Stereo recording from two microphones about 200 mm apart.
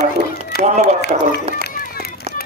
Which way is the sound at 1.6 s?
50° left (ahead or behind).